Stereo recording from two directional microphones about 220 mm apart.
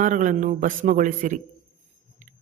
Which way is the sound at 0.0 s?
35° right (ahead or behind).